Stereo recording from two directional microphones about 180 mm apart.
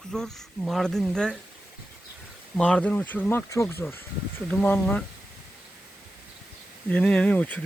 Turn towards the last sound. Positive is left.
turn(degrees=5)  # may be behind; listen again after turning